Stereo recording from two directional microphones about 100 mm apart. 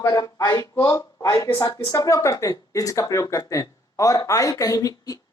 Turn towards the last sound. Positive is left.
turn(degrees=40)  # may be behind; listen again after turning